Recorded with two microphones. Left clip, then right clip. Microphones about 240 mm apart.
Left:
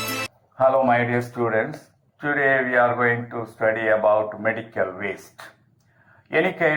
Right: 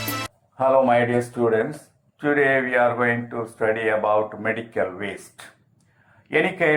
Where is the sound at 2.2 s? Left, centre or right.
Left.